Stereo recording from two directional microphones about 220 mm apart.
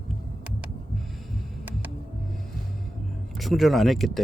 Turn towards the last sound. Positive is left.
turn(degrees=0)  # may be behind; listen again after turning